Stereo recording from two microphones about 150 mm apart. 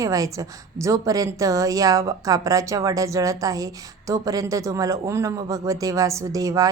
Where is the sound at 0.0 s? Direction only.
20° right (ahead or behind).